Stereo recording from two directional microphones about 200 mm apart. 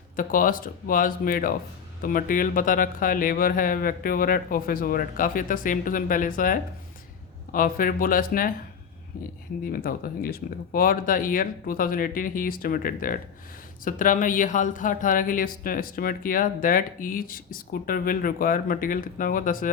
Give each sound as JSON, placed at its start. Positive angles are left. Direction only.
{"t": 0.2, "sound": "speech", "side_deg": 45}
{"t": 9.8, "sound": "speech", "side_deg": 45}